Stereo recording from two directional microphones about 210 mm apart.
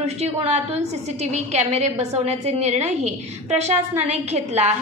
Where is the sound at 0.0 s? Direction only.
30° right (ahead or behind).